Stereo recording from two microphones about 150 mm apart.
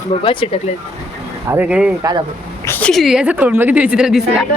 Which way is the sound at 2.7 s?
10° left (ahead or behind).